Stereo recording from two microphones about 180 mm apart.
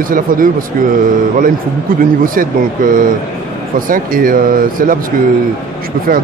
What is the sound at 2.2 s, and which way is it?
A man's voice, 50° right (ahead or behind).